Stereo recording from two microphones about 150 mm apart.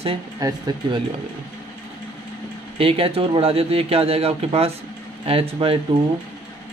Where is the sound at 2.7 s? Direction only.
40° right (ahead or behind).